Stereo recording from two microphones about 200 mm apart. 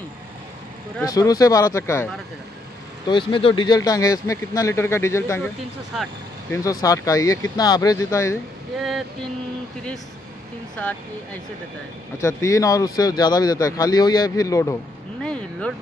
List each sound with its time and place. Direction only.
1.0 s speech: 20° left (ahead or behind)
3.1 s speech: 25° left (ahead or behind)
6.5 s speech: 15° left (ahead or behind)
12.2 s speech: 15° left (ahead or behind)
15.2 s a sound: 5° left (ahead or behind)